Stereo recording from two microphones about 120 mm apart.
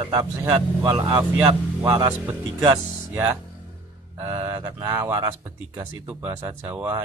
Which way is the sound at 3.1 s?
20° right (ahead or behind).